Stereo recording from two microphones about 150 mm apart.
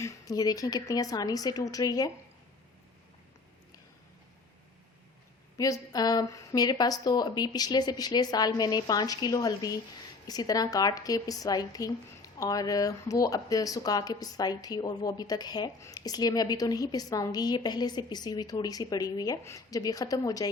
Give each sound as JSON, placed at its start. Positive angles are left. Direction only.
{"t": 0.0, "sound": "a woman's voice", "side_deg": 20}
{"t": 5.5, "sound": "a woman's voice", "side_deg": 25}